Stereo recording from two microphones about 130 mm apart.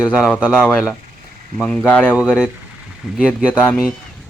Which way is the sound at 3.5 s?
15° left (ahead or behind).